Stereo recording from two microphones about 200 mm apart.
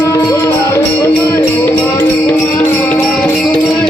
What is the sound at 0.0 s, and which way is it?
Music, 10° left (ahead or behind).